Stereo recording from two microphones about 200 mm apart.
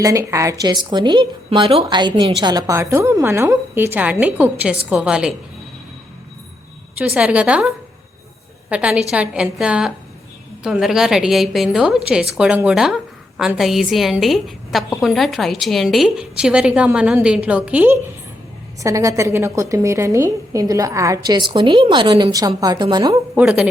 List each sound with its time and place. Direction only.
0.0 s a woman's voice: 15° right (ahead or behind)
7.0 s a woman's voice: 5° right (ahead or behind)
8.7 s a woman's voice: 5° right (ahead or behind); by 23.2 s 20° right (ahead or behind)
23.3 s a woman's voice: 5° right (ahead or behind)